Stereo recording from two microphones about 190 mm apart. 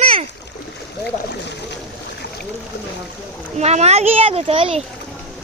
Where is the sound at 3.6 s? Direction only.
35° right (ahead or behind).